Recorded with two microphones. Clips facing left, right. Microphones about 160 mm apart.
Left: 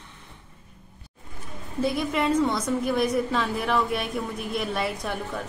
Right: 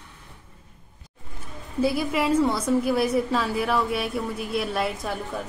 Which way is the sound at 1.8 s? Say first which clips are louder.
Right 2 dB; 5° right (ahead or behind).